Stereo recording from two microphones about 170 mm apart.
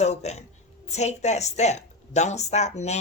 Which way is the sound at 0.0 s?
40° left (ahead or behind).